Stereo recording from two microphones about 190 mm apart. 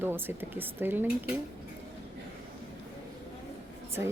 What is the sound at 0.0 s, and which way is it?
A woman's voice, 10° right (ahead or behind).